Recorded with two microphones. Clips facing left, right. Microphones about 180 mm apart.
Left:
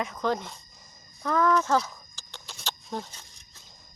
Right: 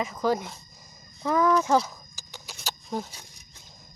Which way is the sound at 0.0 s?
5° right (ahead or behind).